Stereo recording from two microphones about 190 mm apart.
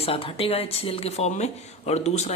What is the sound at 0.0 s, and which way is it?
Speech, 30° left (ahead or behind).